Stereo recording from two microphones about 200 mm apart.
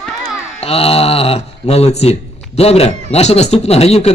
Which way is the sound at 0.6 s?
30° left (ahead or behind).